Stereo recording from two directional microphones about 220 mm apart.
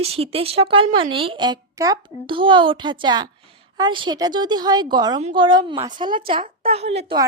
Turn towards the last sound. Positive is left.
turn(degrees=-25)  # may be behind; listen again after turning